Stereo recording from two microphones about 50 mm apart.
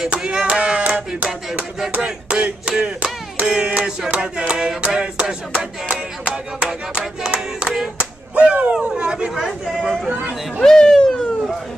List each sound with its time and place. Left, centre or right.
0.2 s a sound: centre
2.8 s clapping: right
3.5 s a sound: centre
5.9 s music: centre
7.6 s hands: centre
8.0 s slap: right
8.8 s chatter: right
9.3 s speech: centre
10.6 s speech: centre